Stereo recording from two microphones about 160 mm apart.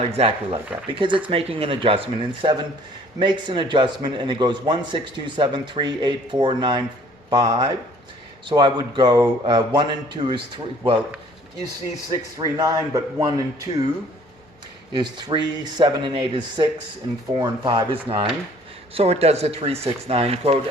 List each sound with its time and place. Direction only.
0.0 s a man's voice: 40° right (ahead or behind)
12.0 s a man's voice: 25° right (ahead or behind)
14.9 s a man's voice: 25° right (ahead or behind)
17.7 s speech: 30° right (ahead or behind)